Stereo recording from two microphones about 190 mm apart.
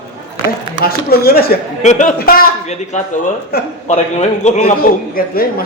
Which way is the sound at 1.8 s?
40° left (ahead or behind).